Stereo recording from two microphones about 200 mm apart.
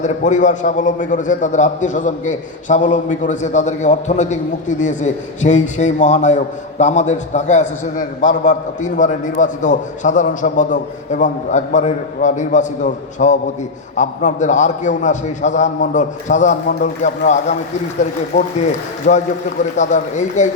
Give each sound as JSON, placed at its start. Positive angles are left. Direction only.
{"t": 0.0, "sound": "a man's voice", "side_deg": 40}